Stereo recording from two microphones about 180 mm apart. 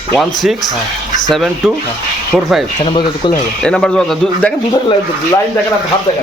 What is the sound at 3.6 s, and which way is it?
Speech, 5° left (ahead or behind).